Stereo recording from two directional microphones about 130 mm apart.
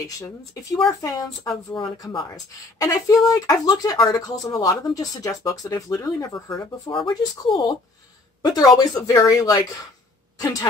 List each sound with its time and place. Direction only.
0.8 s speech: 25° left (ahead or behind)
7.1 s speech: 40° left (ahead or behind)
8.7 s speech: 25° left (ahead or behind)